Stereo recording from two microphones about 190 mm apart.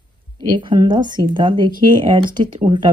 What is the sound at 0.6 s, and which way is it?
Speech, 25° right (ahead or behind).